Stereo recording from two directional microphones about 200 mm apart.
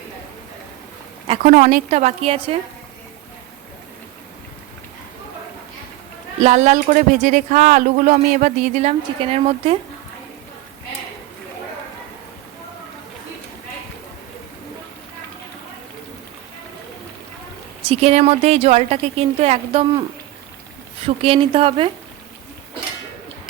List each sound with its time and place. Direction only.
1.3 s speech: 40° right (ahead or behind)
6.4 s speech: 35° right (ahead or behind)
17.8 s speech: 30° right (ahead or behind)